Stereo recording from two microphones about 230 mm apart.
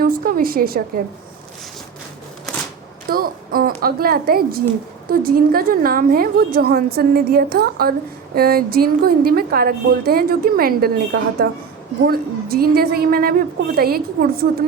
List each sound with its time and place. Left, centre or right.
0.0 s a woman's voice: right
3.1 s a woman's voice: right